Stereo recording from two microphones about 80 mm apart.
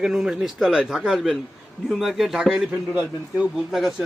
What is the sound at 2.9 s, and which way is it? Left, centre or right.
Speech, centre.